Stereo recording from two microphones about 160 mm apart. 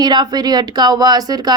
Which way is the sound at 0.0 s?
25° right (ahead or behind).